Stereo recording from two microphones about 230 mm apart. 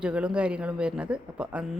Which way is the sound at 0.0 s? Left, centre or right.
Centre.